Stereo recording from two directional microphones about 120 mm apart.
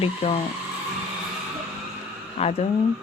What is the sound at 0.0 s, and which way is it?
Speech, 60° left (ahead or behind).